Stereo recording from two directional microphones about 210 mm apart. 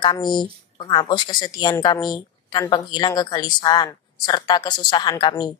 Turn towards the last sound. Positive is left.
turn(degrees=20)  # may be behind; listen again after turning